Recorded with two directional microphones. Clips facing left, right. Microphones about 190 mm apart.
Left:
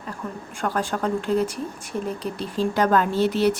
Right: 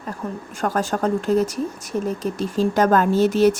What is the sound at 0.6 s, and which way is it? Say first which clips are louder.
Speech: right 3 dB; 45° right (ahead or behind).